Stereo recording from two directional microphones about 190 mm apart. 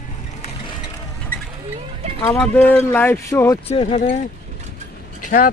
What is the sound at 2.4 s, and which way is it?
Speech, 10° left (ahead or behind).